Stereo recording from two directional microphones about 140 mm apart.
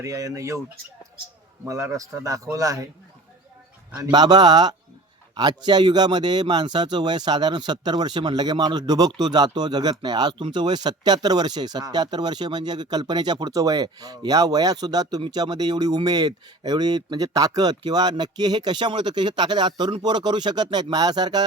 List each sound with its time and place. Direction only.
0.0 s speech: 25° right (ahead or behind)
1.6 s speech: 20° right (ahead or behind)
4.1 s speech: 30° right (ahead or behind)